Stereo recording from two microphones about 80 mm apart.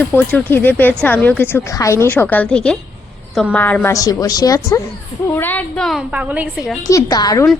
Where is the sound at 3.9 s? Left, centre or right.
Left.